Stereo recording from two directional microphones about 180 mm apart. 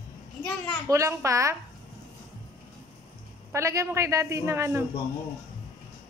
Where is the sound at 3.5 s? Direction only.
15° right (ahead or behind).